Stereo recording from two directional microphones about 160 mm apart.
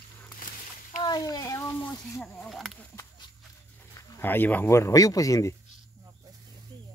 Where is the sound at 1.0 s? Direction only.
25° left (ahead or behind).